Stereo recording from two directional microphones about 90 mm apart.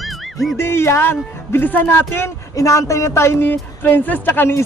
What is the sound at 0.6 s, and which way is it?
Speech, 25° left (ahead or behind).